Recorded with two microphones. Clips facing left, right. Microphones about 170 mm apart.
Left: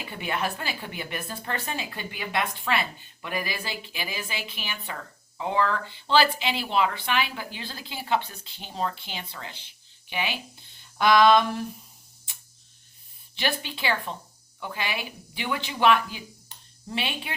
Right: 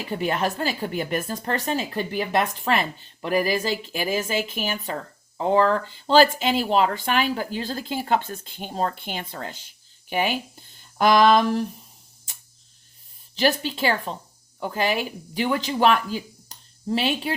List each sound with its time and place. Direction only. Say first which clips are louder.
0.0 s speech: right 6 dB; 40° right (ahead or behind)
12.3 s a sound: right 2 dB; 45° right (ahead or behind)
13.3 s speech: right 8 dB; 40° right (ahead or behind)